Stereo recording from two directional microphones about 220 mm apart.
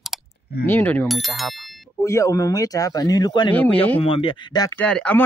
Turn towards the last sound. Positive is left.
turn(degrees=5)  # may be behind; listen again after turning